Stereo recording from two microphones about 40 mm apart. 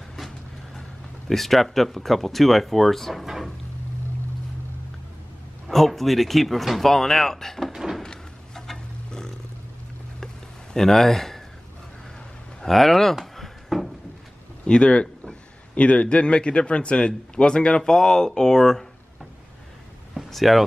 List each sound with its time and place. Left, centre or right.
1.3 s speech: centre
5.7 s speech: centre
7.7 s door: centre
8.0 s a sound: centre
12.6 s speech: centre
13.2 s a sound: centre
14.7 s speech: left
20.2 s speech: centre